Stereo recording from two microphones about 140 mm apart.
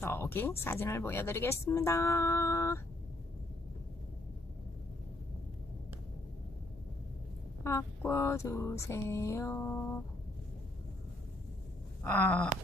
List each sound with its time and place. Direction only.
0.0 s speech: 15° left (ahead or behind)
7.6 s a sound: 20° left (ahead or behind)
12.0 s speech: 10° left (ahead or behind)